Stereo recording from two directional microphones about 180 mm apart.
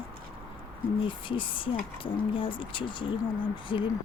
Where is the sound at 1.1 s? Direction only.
30° left (ahead or behind).